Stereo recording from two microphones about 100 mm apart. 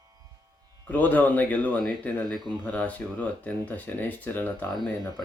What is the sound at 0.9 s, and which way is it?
Speech, 15° left (ahead or behind).